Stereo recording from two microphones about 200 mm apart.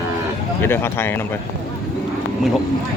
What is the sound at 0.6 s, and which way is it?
Speech, 10° left (ahead or behind).